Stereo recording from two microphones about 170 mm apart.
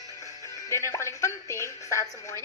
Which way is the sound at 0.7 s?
15° left (ahead or behind).